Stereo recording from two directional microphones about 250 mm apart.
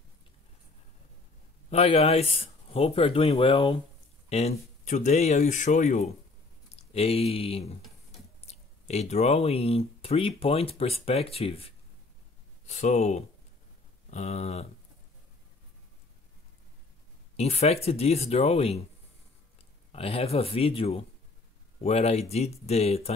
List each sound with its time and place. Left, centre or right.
1.7 s speech: left
17.4 s speech: left
19.9 s speech: left